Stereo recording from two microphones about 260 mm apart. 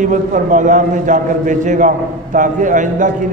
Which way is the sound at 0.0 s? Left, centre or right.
Right.